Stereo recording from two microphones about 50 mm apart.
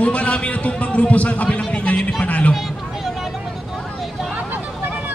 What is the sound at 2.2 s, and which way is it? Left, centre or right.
Music, left.